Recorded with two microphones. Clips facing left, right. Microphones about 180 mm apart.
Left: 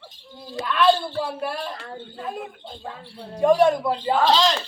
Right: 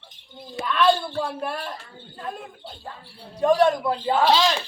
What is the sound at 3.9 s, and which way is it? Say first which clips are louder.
Speech: even; 5° right (ahead or behind).